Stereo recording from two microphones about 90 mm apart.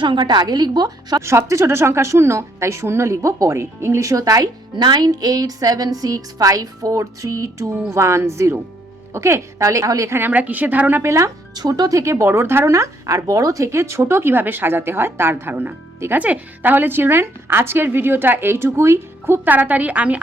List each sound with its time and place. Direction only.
0.0 s speech: 60° right (ahead or behind)
1.2 s speech: 30° right (ahead or behind)
4.7 s speech: 55° right (ahead or behind); by 10.2 s 35° right (ahead or behind)
10.2 s speech: 20° right (ahead or behind)
11.5 s speech: 45° right (ahead or behind); by 20.2 s 15° right (ahead or behind)